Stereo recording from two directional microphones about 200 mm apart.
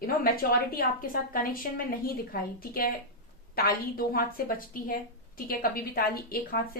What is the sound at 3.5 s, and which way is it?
Speech, 50° left (ahead or behind).